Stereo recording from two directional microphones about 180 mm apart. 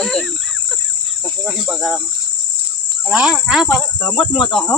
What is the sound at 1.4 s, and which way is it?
Speech, centre (ahead or behind).